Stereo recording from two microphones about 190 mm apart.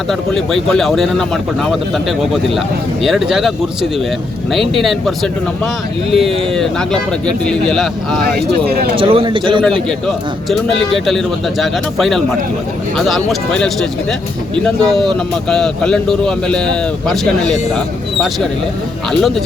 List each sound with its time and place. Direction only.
0.1 s speech: centre (ahead or behind)
4.8 s speech: centre (ahead or behind)
8.6 s speech: 55° right (ahead or behind)
9.0 s a man's voice: 25° right (ahead or behind)
10.8 s speech: centre (ahead or behind)
14.8 s speech: centre (ahead or behind)